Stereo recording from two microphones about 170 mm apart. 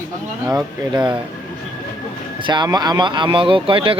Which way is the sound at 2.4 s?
25° right (ahead or behind).